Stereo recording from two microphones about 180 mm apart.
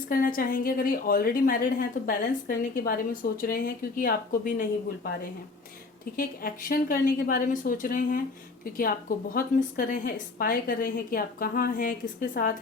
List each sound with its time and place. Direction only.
0.1 s a woman's voice: 50° left (ahead or behind)
6.1 s a woman's voice: 50° left (ahead or behind)